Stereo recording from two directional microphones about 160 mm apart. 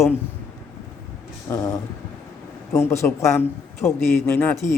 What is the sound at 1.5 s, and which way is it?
A man's voice, 15° left (ahead or behind).